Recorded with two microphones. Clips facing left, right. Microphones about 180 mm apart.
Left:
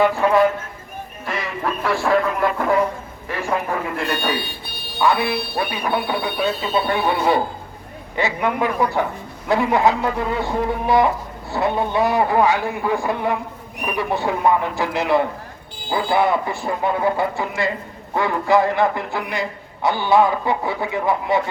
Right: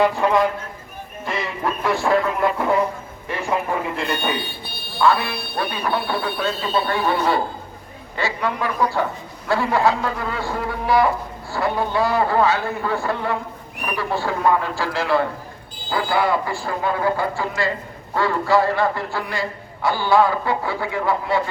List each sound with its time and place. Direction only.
1.3 s speech: centre (ahead or behind)
4.9 s a man's voice: 15° left (ahead or behind)